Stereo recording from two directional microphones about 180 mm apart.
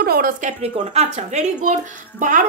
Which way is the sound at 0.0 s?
55° right (ahead or behind).